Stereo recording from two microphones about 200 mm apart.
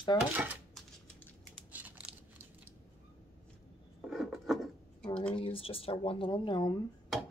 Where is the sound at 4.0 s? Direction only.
Centre (ahead or behind).